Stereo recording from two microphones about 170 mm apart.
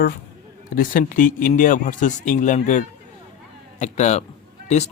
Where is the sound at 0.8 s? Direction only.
55° left (ahead or behind).